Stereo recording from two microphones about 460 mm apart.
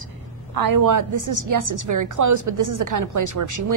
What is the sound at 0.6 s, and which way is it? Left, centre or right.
A woman's voice, right.